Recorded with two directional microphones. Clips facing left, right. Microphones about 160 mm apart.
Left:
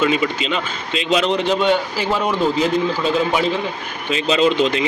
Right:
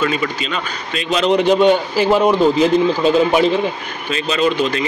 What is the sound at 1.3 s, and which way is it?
Speech, 15° right (ahead or behind).